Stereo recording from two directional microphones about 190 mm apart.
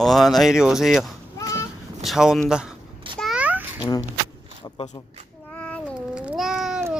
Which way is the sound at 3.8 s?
20° left (ahead or behind).